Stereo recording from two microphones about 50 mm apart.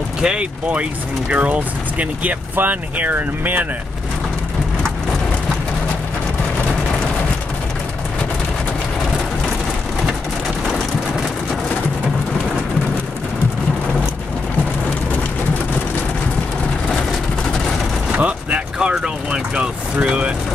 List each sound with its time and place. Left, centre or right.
0.2 s speech: centre; by 3.6 s right
18.1 s a sound: right
18.9 s speech: centre